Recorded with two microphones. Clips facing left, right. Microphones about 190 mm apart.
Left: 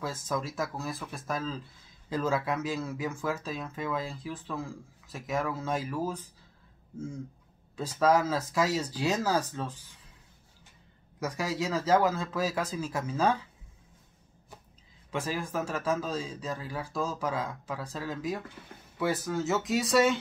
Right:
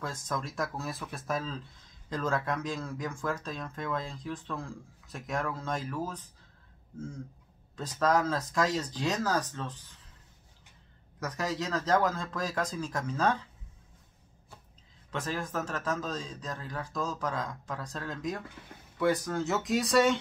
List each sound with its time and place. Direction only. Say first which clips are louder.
0.0 s speech: left 3 dB; 5° left (ahead or behind)
7.7 s speech: left 3 dB; 10° left (ahead or behind)
11.1 s speech: left 2 dB; 10° left (ahead or behind)
15.0 s speech: left 2 dB; 10° left (ahead or behind)